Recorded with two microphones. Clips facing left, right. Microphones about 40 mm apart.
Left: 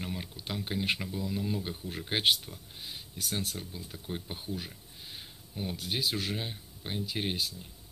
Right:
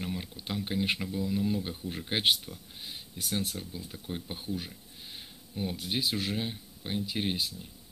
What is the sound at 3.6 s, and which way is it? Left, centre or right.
Speech, centre.